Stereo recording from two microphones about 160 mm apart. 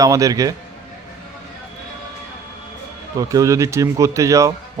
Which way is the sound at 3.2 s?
20° right (ahead or behind).